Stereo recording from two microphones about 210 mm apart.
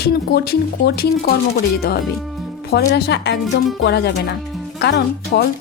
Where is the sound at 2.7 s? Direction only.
50° left (ahead or behind).